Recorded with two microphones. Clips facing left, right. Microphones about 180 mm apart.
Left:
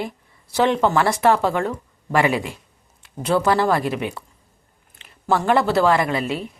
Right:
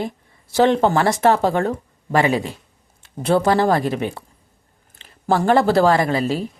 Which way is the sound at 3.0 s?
30° right (ahead or behind).